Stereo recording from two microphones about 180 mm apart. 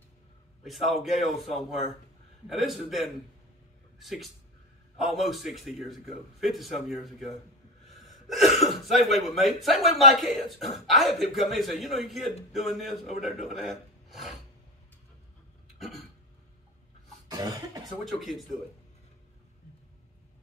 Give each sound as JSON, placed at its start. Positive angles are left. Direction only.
{"t": 0.7, "sound": "a man's voice", "side_deg": 0}
{"t": 7.9, "sound": "gasp", "side_deg": 0}
{"t": 8.6, "sound": "a man's voice", "side_deg": 0}
{"t": 17.3, "sound": "cough", "side_deg": -20}
{"t": 17.8, "sound": "a man's voice", "side_deg": 0}